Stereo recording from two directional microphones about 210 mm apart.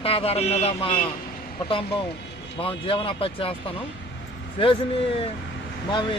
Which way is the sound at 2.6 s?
25° left (ahead or behind).